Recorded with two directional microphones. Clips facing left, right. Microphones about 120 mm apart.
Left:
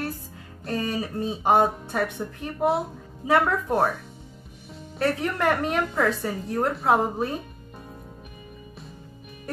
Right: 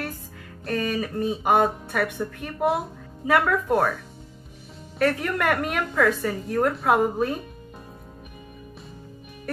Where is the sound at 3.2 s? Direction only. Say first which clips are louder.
Even; 30° left (ahead or behind).